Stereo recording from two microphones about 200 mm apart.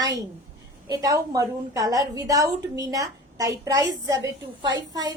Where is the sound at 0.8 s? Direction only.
20° right (ahead or behind).